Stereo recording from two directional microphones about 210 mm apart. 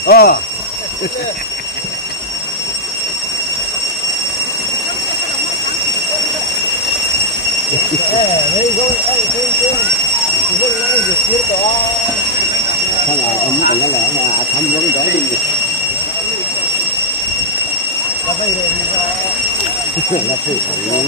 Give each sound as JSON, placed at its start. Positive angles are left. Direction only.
{"t": 0.0, "sound": "speech", "side_deg": 50}